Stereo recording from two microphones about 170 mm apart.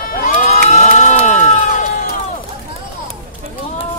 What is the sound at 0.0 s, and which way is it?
Crowd, 55° left (ahead or behind).